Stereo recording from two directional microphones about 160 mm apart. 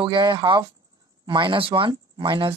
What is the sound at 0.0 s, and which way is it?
Speech, 30° right (ahead or behind).